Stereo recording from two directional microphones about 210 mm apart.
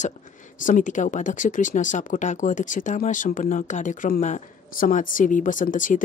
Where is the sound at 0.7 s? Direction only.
35° left (ahead or behind).